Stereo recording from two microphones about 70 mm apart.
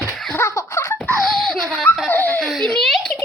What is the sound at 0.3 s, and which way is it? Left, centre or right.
Laughter, left.